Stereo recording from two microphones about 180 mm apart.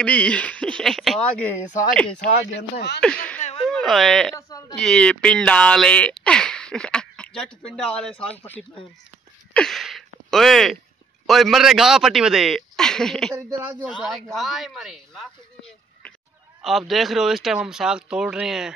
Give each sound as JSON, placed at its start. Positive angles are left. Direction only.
{"t": 0.0, "sound": "speech", "side_deg": 5}
{"t": 1.7, "sound": "speech", "side_deg": 45}
{"t": 3.0, "sound": "speech", "side_deg": 5}
{"t": 4.4, "sound": "a sound", "side_deg": 20}
{"t": 4.7, "sound": "speech", "side_deg": 5}
{"t": 9.5, "sound": "a sound", "side_deg": 5}
{"t": 11.2, "sound": "a man's voice", "side_deg": 0}